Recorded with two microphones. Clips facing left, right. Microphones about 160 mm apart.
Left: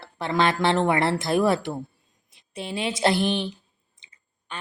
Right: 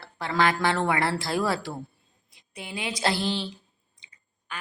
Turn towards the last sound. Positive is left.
turn(degrees=30)  # may be behind; listen again after turning